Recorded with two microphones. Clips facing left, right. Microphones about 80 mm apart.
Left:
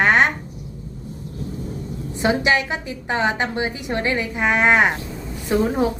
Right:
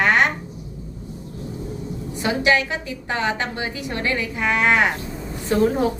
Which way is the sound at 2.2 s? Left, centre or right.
Left.